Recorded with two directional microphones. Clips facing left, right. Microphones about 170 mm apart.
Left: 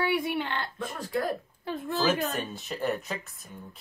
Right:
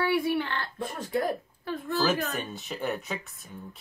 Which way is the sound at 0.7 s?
25° right (ahead or behind).